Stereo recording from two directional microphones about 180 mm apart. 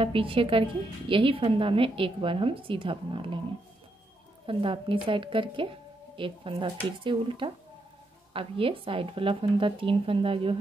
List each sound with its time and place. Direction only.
0.0 s a woman's voice: 30° right (ahead or behind)
4.5 s a woman's voice: 30° right (ahead or behind)